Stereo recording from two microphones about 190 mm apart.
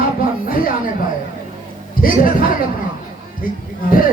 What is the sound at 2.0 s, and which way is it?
Speech, 50° left (ahead or behind).